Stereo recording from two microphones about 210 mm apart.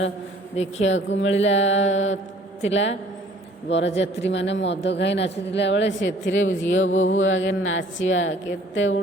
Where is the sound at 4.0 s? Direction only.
60° left (ahead or behind).